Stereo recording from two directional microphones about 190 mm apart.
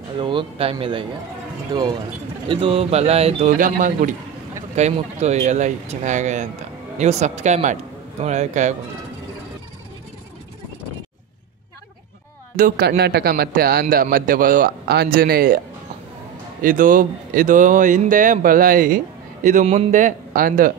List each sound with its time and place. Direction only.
0.2 s speech: 25° right (ahead or behind)
12.5 s a man's voice: 50° right (ahead or behind)
16.6 s a man's voice: 45° right (ahead or behind)